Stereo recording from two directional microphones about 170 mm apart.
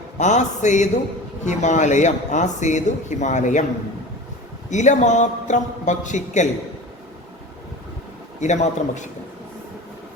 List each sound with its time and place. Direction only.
0.2 s speech: 45° left (ahead or behind)
4.7 s speech: 45° left (ahead or behind)
8.4 s speech: 45° left (ahead or behind)